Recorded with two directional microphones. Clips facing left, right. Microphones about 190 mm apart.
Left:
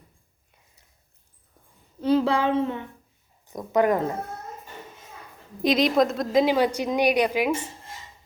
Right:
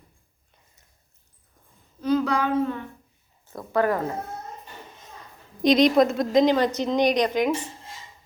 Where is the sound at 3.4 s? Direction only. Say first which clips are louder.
Left 2 dB; 15° left (ahead or behind).